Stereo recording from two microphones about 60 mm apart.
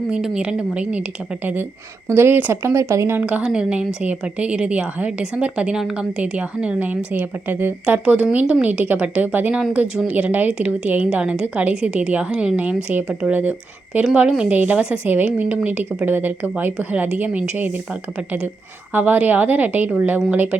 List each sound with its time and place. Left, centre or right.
0.1 s a woman's voice: centre
2.0 s speech: right
2.5 s speech: right
3.2 s a woman's voice: centre
7.9 s a woman's voice: centre
9.8 s a woman's voice: centre
10.1 s a woman's voice: right
14.3 s a woman's voice: centre
14.5 s a woman's voice: right
18.9 s a woman's voice: right